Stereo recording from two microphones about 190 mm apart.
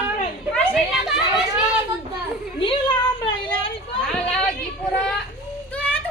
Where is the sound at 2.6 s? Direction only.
25° left (ahead or behind).